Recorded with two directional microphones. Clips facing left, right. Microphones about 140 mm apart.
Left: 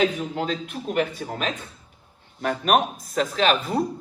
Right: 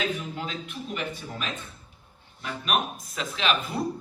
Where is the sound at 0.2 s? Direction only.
45° left (ahead or behind).